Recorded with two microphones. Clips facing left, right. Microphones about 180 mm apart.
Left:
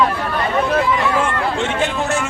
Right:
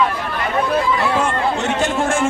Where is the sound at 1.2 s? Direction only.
40° right (ahead or behind).